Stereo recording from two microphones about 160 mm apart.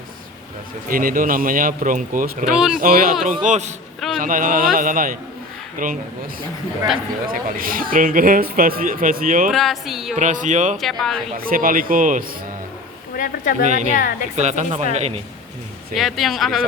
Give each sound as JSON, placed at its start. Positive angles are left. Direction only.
{"t": 0.9, "sound": "speech", "side_deg": -60}
{"t": 2.5, "sound": "speech", "side_deg": -5}
{"t": 2.7, "sound": "speech", "side_deg": -65}
{"t": 3.4, "sound": "speech", "side_deg": -50}
{"t": 7.6, "sound": "speech", "side_deg": -60}
{"t": 9.5, "sound": "speech", "side_deg": 0}
{"t": 10.2, "sound": "speech", "side_deg": -50}
{"t": 10.8, "sound": "speech", "side_deg": 0}
{"t": 11.3, "sound": "speech", "side_deg": -65}
{"t": 13.1, "sound": "speech", "side_deg": 60}
{"t": 13.7, "sound": "speech", "side_deg": -50}
{"t": 13.9, "sound": "a woman's voice", "side_deg": 60}
{"t": 14.3, "sound": "speech", "side_deg": -45}
{"t": 16.0, "sound": "speech", "side_deg": 0}